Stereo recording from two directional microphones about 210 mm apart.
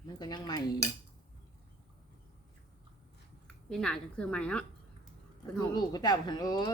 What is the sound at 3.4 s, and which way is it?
A woman's voice, 5° left (ahead or behind).